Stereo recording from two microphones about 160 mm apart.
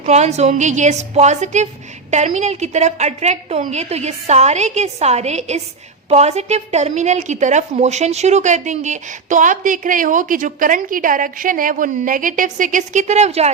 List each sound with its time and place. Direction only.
0.0 s a woman's voice: 45° right (ahead or behind)